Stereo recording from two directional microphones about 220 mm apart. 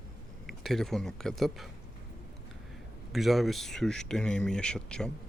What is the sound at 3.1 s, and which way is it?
Speech, centre (ahead or behind).